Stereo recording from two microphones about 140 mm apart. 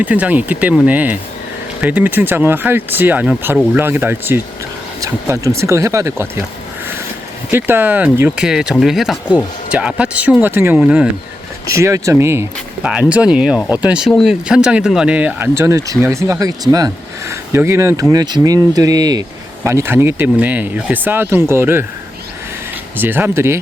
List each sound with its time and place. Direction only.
0.0 s speech: 10° right (ahead or behind)
7.5 s speech: 15° right (ahead or behind)
11.7 s speech: 20° right (ahead or behind)
12.8 s speech: 10° right (ahead or behind)
23.0 s speech: 15° right (ahead or behind)